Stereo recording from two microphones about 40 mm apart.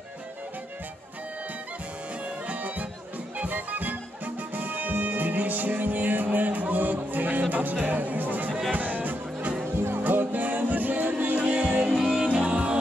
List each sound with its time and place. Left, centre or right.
2.2 s music: right
11.9 s music: centre
12.2 s music: right